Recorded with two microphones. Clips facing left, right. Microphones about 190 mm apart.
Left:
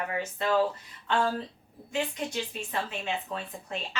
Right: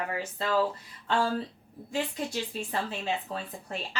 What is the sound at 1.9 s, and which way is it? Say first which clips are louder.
Speech: even; 35° right (ahead or behind).